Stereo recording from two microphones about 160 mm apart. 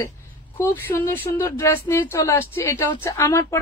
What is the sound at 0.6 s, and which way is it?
A woman's voice, 15° left (ahead or behind).